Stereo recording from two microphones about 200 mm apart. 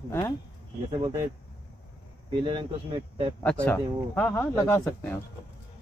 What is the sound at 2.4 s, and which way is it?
Speech, 25° right (ahead or behind).